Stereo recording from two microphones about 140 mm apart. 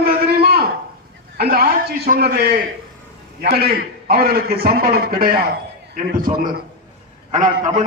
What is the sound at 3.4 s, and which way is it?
A man's voice, 90° right.